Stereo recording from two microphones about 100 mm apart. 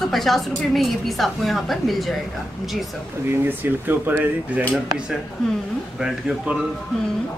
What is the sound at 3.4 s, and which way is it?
Speech, 20° right (ahead or behind).